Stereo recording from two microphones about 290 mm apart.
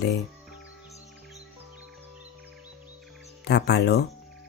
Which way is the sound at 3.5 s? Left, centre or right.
Left.